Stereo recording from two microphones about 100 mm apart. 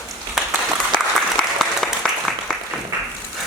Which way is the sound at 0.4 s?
5° right (ahead or behind).